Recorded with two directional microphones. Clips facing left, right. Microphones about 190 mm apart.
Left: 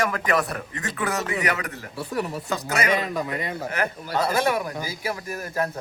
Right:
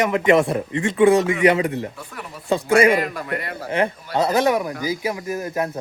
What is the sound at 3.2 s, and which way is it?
Speech, 20° left (ahead or behind).